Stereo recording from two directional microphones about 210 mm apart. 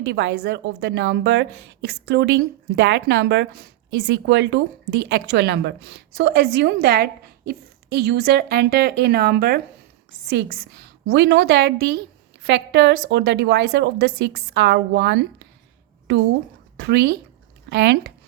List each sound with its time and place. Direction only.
0.1 s a woman's voice: 55° right (ahead or behind)
16.7 s speech: 55° right (ahead or behind)